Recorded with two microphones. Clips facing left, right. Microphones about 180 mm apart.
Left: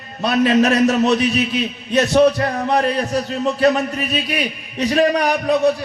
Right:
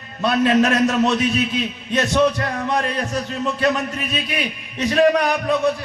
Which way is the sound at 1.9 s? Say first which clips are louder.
Left 4 dB; 35° left (ahead or behind).